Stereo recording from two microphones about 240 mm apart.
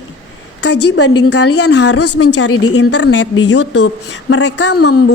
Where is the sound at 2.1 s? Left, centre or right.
Left.